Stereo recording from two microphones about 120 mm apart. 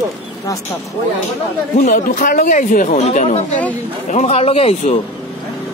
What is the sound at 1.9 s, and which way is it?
Speech, 90° left.